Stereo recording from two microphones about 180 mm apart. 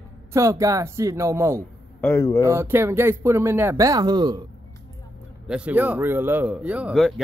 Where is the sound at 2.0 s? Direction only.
15° left (ahead or behind).